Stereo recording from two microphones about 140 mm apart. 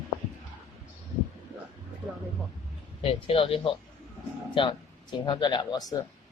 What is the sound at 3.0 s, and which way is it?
Speech, 40° left (ahead or behind).